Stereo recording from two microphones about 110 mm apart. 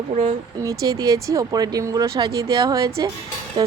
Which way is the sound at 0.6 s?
30° right (ahead or behind).